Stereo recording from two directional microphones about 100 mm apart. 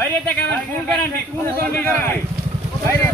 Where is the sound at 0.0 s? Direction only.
20° left (ahead or behind).